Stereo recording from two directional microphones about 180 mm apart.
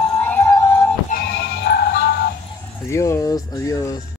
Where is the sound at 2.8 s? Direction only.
15° left (ahead or behind).